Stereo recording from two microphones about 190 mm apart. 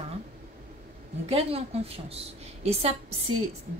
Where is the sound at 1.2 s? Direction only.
30° right (ahead or behind).